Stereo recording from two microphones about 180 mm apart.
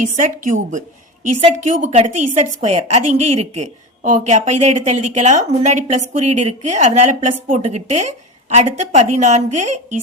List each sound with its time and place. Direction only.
0.0 s a woman's voice: 45° right (ahead or behind)